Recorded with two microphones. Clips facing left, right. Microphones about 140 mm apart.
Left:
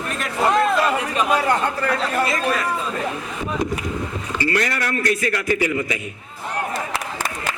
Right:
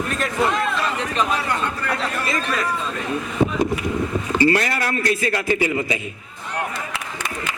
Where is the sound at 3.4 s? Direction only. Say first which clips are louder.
Right 9 dB; 75° right (ahead or behind).